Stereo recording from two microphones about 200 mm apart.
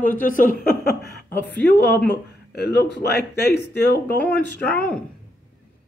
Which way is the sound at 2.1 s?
55° left (ahead or behind).